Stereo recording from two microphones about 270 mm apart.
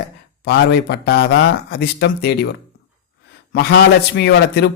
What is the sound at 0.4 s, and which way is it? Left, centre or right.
A man's voice, left.